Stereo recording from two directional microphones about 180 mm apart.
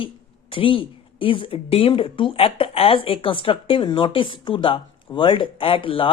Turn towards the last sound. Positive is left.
turn(degrees=30)  # may be behind; listen again after turning